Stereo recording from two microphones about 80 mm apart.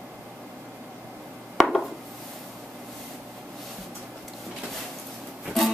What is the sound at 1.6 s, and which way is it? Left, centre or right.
Dishes, centre.